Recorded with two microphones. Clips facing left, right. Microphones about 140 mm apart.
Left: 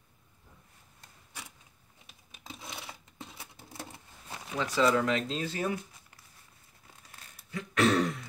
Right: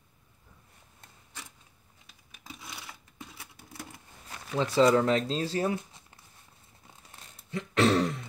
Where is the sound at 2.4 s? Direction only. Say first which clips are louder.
Left 1 dB; 20° left (ahead or behind).